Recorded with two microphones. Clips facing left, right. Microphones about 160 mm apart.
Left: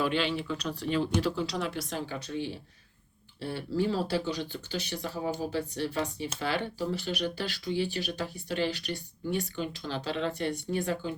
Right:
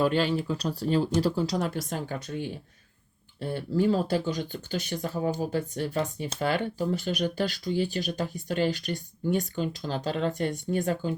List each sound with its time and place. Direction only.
0.0 s speech: 40° right (ahead or behind)